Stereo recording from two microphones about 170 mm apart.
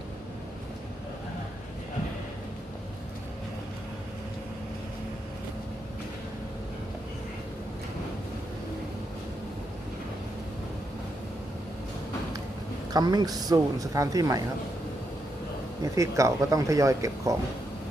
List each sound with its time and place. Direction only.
12.9 s speech: 25° right (ahead or behind)
15.8 s speech: 20° right (ahead or behind)